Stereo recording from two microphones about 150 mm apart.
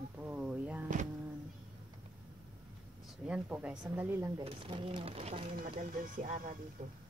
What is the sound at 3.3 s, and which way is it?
Speech, 10° right (ahead or behind).